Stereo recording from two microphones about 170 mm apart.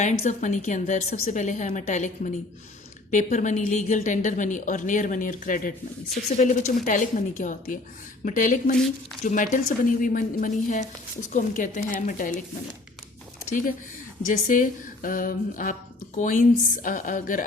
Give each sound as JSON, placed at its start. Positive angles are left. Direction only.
{"t": 0.0, "sound": "a woman's voice", "side_deg": 45}
{"t": 14.3, "sound": "a woman's voice", "side_deg": 50}